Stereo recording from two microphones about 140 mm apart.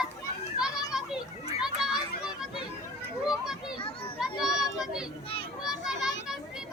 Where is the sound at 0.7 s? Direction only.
25° left (ahead or behind).